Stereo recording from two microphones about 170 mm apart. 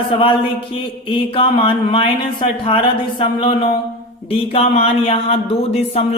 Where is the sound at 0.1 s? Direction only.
30° left (ahead or behind).